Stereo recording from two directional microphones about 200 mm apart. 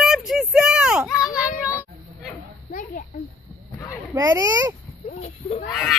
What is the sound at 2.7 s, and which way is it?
Speech, 45° left (ahead or behind).